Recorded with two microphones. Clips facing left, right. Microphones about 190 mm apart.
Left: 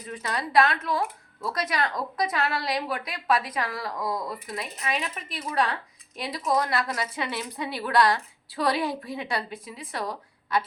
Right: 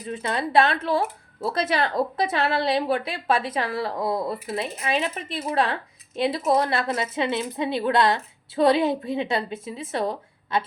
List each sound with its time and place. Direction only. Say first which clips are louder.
0.1 s a woman's voice: right 3 dB; 25° right (ahead or behind)